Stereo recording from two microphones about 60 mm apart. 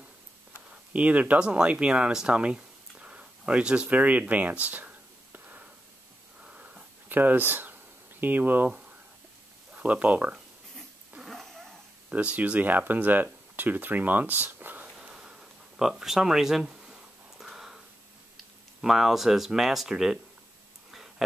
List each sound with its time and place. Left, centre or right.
0.9 s speech: right
6.4 s wheeze: centre
7.1 s speech: right
8.6 s a sound: centre
9.8 s speech: right
11.2 s cat: centre
12.1 s speech: right
14.9 s a sound: centre
18.8 s speech: centre